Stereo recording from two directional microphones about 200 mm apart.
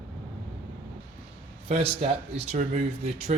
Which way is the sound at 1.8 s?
30° right (ahead or behind).